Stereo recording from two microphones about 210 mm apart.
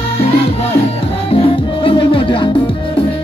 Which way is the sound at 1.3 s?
25° left (ahead or behind).